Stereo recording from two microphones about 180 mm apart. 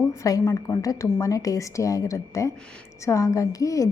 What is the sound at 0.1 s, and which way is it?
A woman's voice, 20° left (ahead or behind).